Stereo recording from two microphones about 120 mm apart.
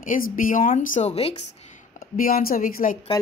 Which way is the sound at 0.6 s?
85° left.